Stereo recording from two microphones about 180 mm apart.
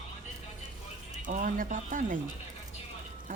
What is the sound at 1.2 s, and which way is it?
Speech, 45° right (ahead or behind).